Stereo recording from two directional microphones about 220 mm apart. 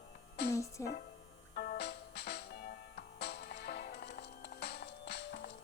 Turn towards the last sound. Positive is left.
turn(degrees=50)  # may be behind; listen again after turning